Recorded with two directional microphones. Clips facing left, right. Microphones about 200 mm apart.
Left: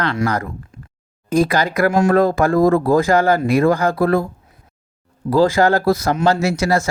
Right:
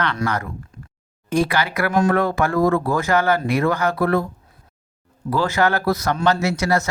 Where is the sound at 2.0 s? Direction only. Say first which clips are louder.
Left 3 dB; 35° left (ahead or behind).